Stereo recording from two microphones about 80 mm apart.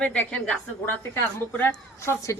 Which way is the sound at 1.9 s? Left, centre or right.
Left.